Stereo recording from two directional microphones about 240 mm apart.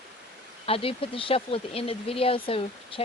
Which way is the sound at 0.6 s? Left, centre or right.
Left.